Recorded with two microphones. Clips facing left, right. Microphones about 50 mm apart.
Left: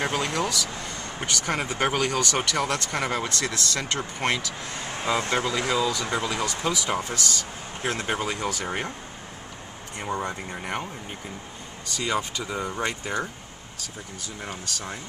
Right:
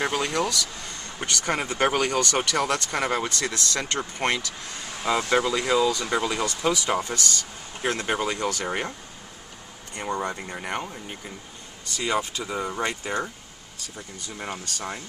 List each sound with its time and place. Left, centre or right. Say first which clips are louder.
0.0 s speech: right 1 dB; centre
4.8 s vehicle: right 1 dB; left
5.5 s speech: right 2 dB; centre
8.6 s speech: right 1 dB; centre
9.9 s speech: right 1 dB; centre
14.6 s speech: right 1 dB; centre